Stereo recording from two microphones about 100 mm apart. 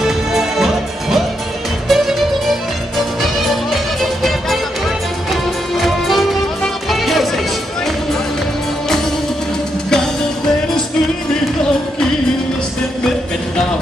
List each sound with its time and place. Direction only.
0.0 s music: 5° right (ahead or behind)
1.9 s music: centre (ahead or behind)